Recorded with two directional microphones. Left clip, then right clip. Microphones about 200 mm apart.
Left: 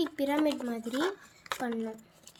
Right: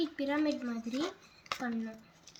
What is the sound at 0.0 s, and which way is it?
Speech, 55° left (ahead or behind).